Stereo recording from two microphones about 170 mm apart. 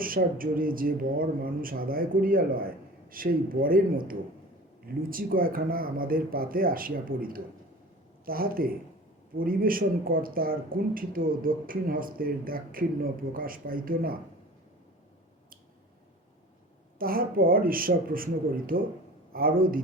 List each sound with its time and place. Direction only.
0.0 s speech: 55° right (ahead or behind)
17.0 s speech: 60° right (ahead or behind)